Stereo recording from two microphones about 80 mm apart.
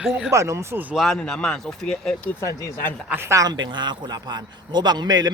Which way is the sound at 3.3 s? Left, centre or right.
Right.